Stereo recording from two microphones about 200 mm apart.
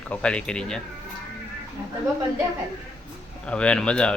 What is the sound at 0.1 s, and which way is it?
Speech, 5° left (ahead or behind).